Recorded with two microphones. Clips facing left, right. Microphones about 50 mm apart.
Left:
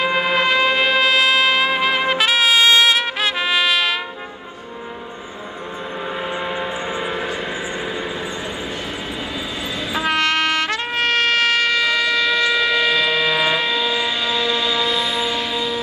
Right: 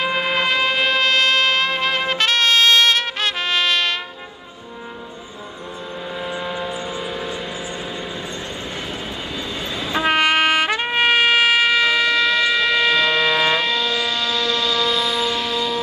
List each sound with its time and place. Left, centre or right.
0.0 s music: centre
6.1 s a sound: left
10.0 s trumpet: centre